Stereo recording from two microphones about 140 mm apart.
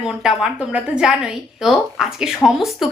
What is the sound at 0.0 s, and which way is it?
A woman's voice, 5° right (ahead or behind).